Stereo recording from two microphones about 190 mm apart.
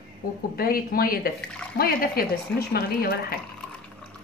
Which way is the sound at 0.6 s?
50° left (ahead or behind).